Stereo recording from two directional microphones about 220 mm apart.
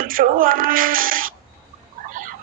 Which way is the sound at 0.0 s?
40° right (ahead or behind).